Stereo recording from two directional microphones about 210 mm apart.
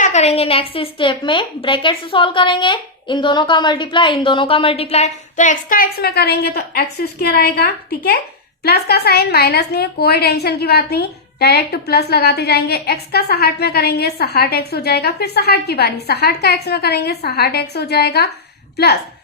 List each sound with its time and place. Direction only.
0.0 s a woman's voice: 35° left (ahead or behind); by 18.3 s 50° left (ahead or behind)